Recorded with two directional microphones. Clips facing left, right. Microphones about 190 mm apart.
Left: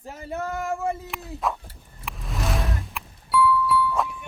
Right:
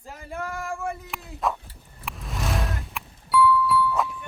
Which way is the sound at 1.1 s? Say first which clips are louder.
Even; centre (ahead or behind).